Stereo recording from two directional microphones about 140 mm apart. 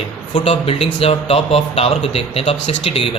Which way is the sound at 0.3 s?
45° left (ahead or behind).